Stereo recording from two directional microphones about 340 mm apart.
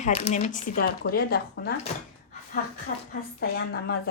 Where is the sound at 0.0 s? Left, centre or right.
Centre.